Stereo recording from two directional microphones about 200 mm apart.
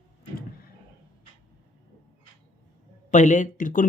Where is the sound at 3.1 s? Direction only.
40° left (ahead or behind).